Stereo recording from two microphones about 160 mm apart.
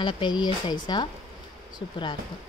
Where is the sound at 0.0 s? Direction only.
30° left (ahead or behind).